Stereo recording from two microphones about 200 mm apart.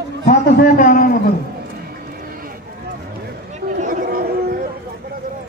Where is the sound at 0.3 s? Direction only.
40° left (ahead or behind).